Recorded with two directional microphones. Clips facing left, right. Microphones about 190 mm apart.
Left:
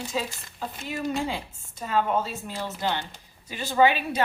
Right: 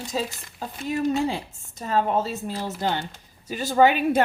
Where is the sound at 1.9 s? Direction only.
40° right (ahead or behind).